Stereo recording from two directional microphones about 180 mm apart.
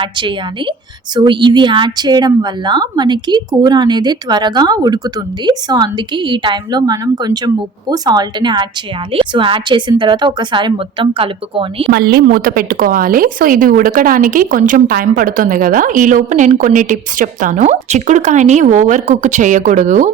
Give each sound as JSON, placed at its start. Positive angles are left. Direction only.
{"t": 0.0, "sound": "a woman's voice", "side_deg": -25}
{"t": 11.9, "sound": "speech", "side_deg": -60}